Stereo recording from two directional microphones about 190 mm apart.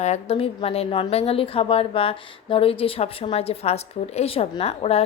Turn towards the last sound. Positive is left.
turn(degrees=30)  # may be behind; listen again after turning